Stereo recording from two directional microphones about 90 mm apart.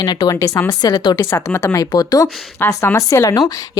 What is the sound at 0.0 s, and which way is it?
Speech, 50° left (ahead or behind).